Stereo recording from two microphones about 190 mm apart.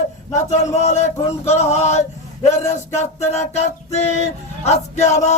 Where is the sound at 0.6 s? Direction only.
35° left (ahead or behind).